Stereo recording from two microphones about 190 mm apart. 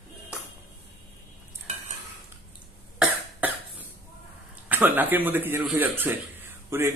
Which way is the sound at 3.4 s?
10° right (ahead or behind).